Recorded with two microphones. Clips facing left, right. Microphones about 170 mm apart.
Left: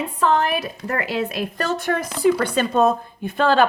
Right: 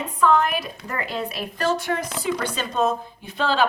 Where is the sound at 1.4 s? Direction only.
50° left (ahead or behind).